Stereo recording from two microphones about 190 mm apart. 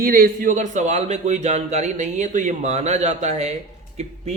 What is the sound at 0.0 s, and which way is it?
Speech, 50° right (ahead or behind).